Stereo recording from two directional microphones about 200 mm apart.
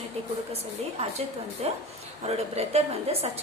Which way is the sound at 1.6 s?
35° right (ahead or behind).